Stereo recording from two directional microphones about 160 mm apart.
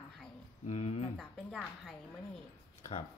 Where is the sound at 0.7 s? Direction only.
40° left (ahead or behind).